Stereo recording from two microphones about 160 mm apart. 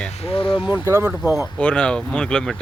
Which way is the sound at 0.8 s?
20° right (ahead or behind).